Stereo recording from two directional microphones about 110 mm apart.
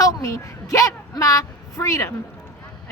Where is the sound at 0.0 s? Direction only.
30° left (ahead or behind).